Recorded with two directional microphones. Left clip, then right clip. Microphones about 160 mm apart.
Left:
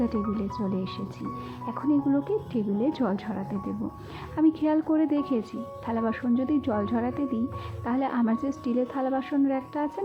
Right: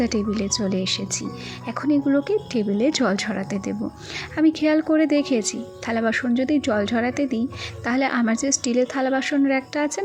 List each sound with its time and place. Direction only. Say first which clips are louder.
0.0 s a woman's voice: right 5 dB; 20° right (ahead or behind)